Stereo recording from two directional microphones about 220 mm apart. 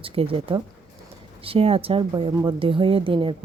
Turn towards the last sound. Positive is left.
turn(degrees=-25)  # may be behind; listen again after turning